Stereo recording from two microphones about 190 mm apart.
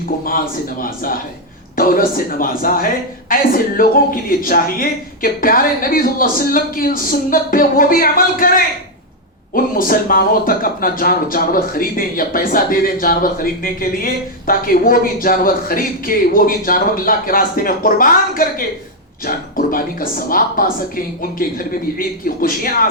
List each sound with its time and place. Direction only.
0.3 s speech: 50° left (ahead or behind)